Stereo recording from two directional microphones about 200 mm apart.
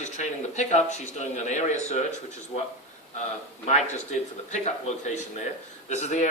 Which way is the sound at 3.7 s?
35° left (ahead or behind).